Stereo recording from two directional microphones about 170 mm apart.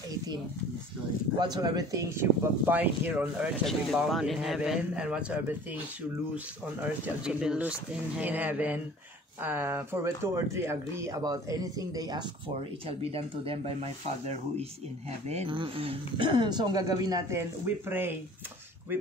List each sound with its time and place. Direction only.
1.4 s speech: 25° right (ahead or behind)
12.8 s speech: 35° right (ahead or behind); by 18.1 s 10° right (ahead or behind)